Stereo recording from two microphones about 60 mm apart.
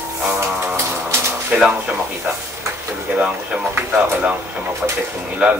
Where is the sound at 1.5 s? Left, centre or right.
Right.